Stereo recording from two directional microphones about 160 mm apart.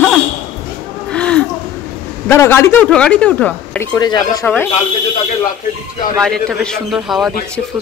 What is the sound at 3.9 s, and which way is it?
Speech, 25° left (ahead or behind).